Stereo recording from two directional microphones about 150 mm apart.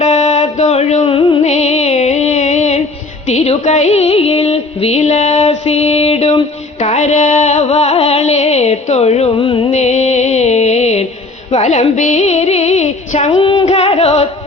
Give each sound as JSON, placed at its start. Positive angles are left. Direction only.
{"t": 0.0, "sound": "music", "side_deg": 50}
{"t": 1.4, "sound": "music", "side_deg": 50}
{"t": 9.7, "sound": "music", "side_deg": 50}
{"t": 13.4, "sound": "female singing", "side_deg": 35}
{"t": 13.7, "sound": "music", "side_deg": 45}